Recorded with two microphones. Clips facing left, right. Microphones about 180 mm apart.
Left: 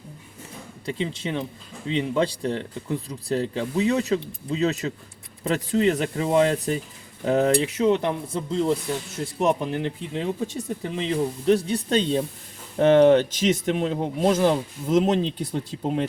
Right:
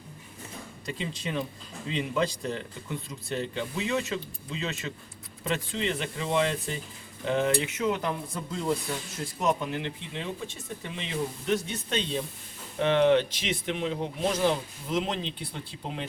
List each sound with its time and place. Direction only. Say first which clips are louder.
0.9 s speech: left 6 dB; 25° left (ahead or behind); by 16.0 s 45° left (ahead or behind)